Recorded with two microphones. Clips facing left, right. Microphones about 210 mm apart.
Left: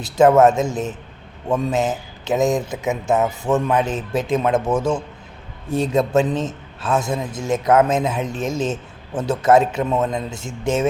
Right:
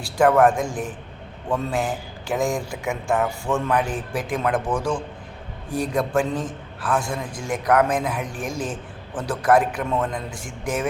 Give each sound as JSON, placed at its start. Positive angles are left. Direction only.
{"t": 0.0, "sound": "a man's voice", "side_deg": 20}